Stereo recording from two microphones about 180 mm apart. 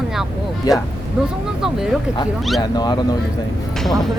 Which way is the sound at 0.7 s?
20° left (ahead or behind).